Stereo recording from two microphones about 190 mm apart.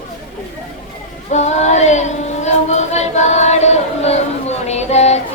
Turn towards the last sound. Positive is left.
turn(degrees=35)  # may be behind; listen again after turning